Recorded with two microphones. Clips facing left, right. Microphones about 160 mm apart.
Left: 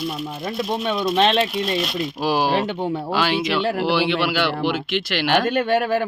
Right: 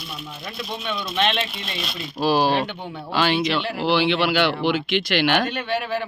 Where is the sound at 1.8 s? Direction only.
10° left (ahead or behind).